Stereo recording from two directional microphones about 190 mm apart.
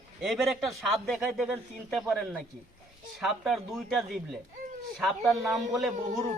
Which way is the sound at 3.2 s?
Centre (ahead or behind).